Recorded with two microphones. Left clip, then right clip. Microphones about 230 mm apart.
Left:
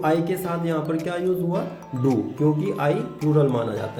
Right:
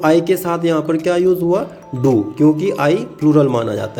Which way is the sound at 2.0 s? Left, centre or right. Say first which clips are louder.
Right 9 dB; right.